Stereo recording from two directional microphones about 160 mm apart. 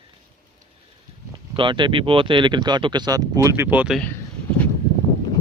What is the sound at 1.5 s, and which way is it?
Speech, 30° right (ahead or behind).